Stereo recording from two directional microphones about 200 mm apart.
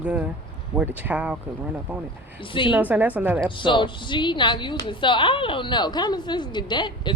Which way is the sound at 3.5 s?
25° left (ahead or behind).